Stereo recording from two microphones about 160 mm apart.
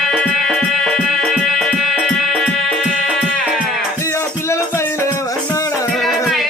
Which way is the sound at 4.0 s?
15° left (ahead or behind).